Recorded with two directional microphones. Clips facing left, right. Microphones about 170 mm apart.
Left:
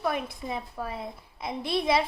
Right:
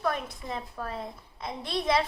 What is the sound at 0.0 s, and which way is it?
A woman's voice, 10° left (ahead or behind).